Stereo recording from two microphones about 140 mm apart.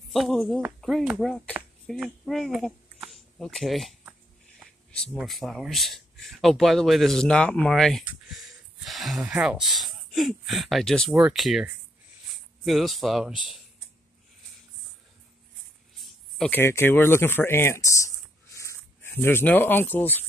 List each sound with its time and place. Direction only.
0.1 s speech: 5° left (ahead or behind)
5.1 s speech: centre (ahead or behind)
12.6 s speech: centre (ahead or behind)
16.0 s a sound: 5° left (ahead or behind)
16.5 s speech: 15° left (ahead or behind)